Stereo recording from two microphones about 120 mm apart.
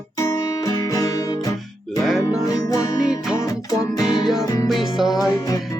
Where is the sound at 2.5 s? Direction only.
30° left (ahead or behind).